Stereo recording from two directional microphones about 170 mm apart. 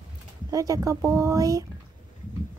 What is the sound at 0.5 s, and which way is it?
Speech, 20° right (ahead or behind).